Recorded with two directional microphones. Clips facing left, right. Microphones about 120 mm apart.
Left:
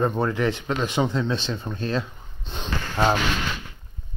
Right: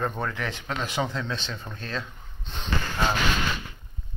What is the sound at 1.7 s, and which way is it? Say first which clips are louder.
Sniff: left 8 dB; 25° left (ahead or behind).